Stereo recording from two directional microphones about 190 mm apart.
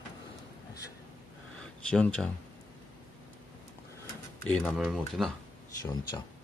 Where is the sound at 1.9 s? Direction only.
5° left (ahead or behind).